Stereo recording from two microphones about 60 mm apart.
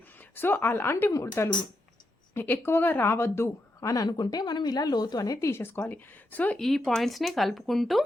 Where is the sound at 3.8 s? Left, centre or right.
Left.